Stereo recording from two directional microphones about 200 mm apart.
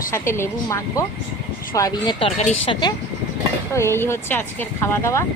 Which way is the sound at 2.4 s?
30° left (ahead or behind).